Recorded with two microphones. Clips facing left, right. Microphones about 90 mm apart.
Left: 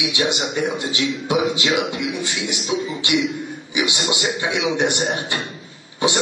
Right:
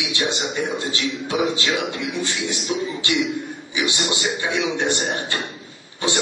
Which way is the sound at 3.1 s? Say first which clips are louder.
Left 3 dB; 15° left (ahead or behind).